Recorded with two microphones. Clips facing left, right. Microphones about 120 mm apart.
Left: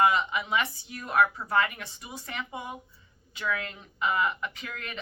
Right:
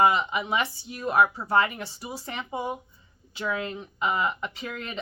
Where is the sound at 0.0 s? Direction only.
25° right (ahead or behind).